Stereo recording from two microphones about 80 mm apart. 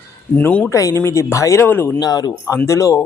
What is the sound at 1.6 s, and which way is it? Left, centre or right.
Speech, left.